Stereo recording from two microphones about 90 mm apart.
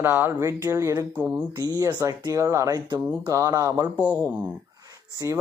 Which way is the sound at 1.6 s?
40° right (ahead or behind).